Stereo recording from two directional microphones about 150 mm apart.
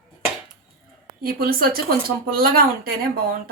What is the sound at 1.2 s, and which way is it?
Speech, 80° right.